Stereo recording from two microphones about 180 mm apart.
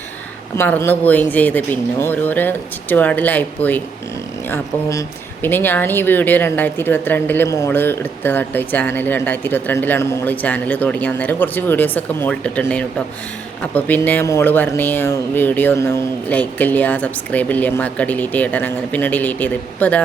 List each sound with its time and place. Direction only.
0.5 s speech: 15° left (ahead or behind)